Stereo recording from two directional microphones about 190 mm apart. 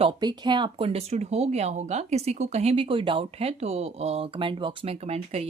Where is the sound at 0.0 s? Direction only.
25° right (ahead or behind).